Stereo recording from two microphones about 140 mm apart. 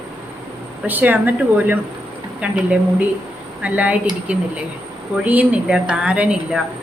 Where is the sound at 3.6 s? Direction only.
10° right (ahead or behind).